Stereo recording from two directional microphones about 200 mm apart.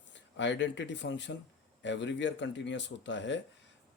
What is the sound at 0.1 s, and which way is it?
Speech, 60° left (ahead or behind).